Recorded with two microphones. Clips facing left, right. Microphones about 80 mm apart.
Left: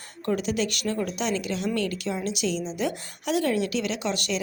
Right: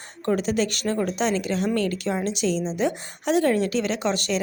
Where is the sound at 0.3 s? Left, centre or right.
Right.